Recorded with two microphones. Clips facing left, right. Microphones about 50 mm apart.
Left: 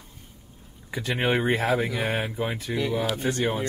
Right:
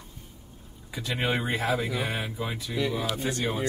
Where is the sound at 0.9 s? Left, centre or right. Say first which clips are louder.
Left 4 dB; left.